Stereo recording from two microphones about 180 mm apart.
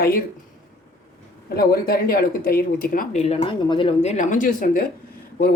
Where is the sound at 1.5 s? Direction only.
55° left (ahead or behind).